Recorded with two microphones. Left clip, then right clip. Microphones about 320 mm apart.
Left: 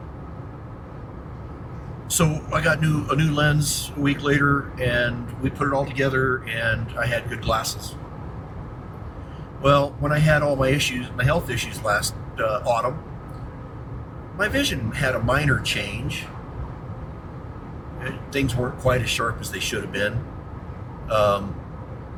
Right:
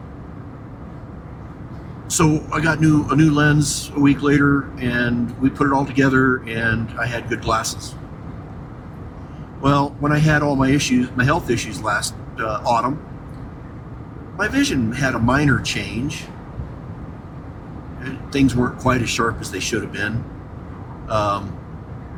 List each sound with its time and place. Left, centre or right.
2.1 s speech: right
9.6 s speech: right
14.3 s speech: right
18.3 s speech: right